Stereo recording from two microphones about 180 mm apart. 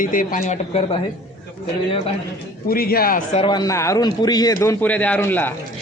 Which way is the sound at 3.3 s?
25° left (ahead or behind).